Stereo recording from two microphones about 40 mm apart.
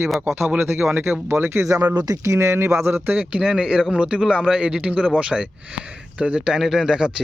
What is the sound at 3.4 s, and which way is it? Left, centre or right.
A man's voice, right.